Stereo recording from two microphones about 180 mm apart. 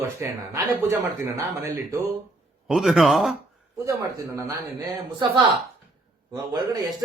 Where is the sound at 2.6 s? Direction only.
Centre (ahead or behind).